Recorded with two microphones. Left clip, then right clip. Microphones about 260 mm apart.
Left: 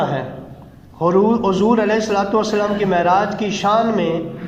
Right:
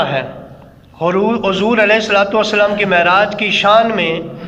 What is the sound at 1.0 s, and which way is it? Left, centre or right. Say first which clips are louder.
A man's voice: right 1 dB; left.